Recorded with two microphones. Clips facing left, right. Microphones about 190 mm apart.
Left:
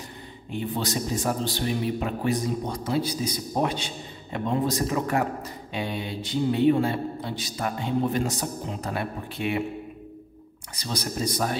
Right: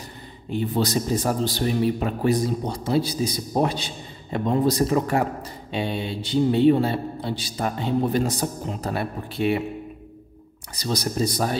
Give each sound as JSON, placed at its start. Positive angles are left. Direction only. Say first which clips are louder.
{"t": 0.5, "sound": "a man's voice", "louder": "right 5 dB", "side_deg": -35}
{"t": 10.8, "sound": "a man's voice", "louder": "right 5 dB", "side_deg": -35}